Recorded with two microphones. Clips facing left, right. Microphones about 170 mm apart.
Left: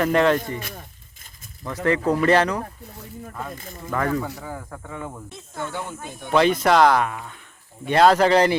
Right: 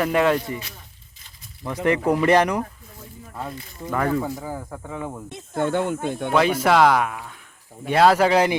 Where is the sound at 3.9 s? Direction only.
10° right (ahead or behind).